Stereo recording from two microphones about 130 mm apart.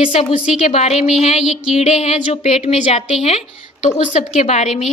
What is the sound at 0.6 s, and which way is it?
A woman's voice, 55° left (ahead or behind).